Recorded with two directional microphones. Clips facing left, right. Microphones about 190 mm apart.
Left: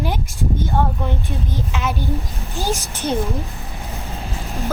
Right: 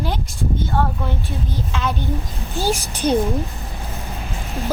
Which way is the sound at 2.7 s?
15° right (ahead or behind).